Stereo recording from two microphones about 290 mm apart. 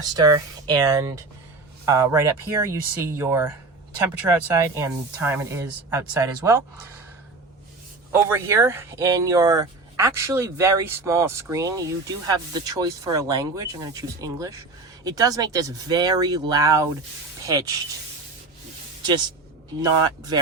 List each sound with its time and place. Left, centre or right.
0.0 s speech: centre
8.1 s speech: centre
19.8 s speech: centre